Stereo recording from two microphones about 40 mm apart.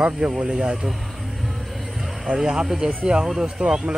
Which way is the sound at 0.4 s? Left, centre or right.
Centre.